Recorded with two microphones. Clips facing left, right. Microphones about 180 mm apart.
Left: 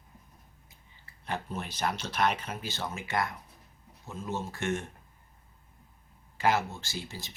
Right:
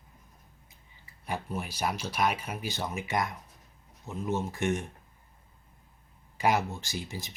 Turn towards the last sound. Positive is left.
turn(degrees=-15)  # may be behind; listen again after turning